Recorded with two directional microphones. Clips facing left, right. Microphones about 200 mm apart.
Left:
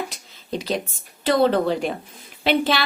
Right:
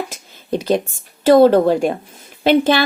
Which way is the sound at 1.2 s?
45° right (ahead or behind).